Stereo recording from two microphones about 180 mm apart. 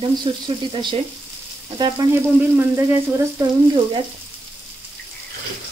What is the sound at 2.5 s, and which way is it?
Frying, 15° right (ahead or behind).